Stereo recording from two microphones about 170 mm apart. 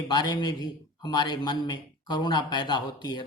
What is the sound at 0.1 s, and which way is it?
A man's voice, 25° left (ahead or behind).